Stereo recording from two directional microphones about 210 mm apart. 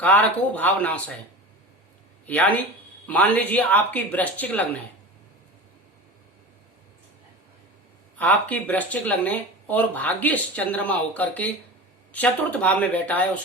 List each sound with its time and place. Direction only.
0.0 s speech: 5° left (ahead or behind)
2.2 s speech: 5° left (ahead or behind)
8.2 s speech: 5° left (ahead or behind)